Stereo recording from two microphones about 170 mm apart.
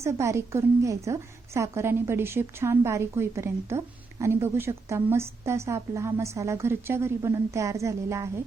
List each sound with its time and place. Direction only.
0.0 s a woman's voice: 15° right (ahead or behind)